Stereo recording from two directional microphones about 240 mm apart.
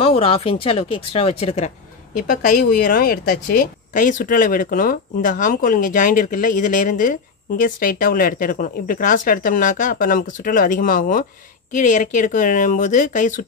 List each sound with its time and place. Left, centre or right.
0.0 s speech: left